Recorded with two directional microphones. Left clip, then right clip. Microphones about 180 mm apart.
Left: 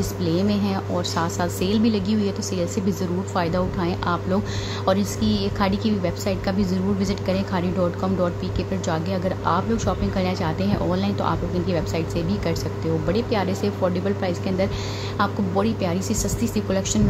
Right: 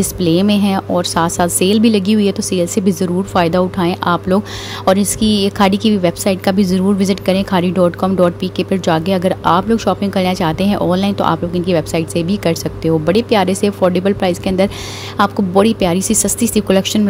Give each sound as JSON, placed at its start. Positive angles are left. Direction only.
{"t": 0.0, "sound": "a woman's voice", "side_deg": -45}